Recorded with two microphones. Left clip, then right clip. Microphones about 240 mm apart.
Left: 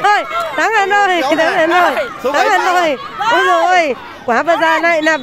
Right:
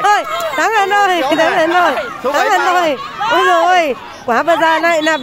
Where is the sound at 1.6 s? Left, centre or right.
Left.